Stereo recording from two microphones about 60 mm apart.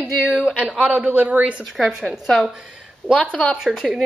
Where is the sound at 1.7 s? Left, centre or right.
Centre.